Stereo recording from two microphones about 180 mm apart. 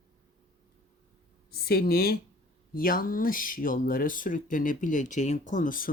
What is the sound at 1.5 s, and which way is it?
Speech, 60° left (ahead or behind).